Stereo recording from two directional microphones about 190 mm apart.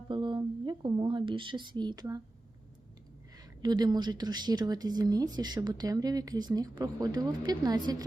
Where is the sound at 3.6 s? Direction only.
20° right (ahead or behind).